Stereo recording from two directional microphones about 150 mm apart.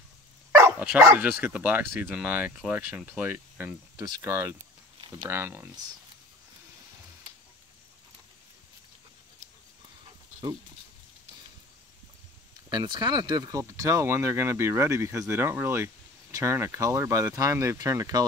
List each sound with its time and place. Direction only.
0.5 s speech: 20° right (ahead or behind)
3.9 s speech: 25° right (ahead or behind)
12.6 s speech: 30° right (ahead or behind)